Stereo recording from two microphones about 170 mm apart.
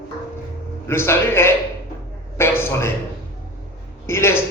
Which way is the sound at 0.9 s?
15° left (ahead or behind).